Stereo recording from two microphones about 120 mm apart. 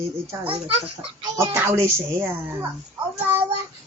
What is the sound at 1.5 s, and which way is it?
Speech, 20° right (ahead or behind).